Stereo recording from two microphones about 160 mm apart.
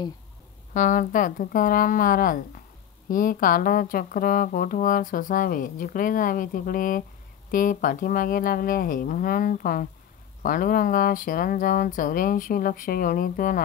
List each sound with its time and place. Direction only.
0.7 s speech: 55° left (ahead or behind)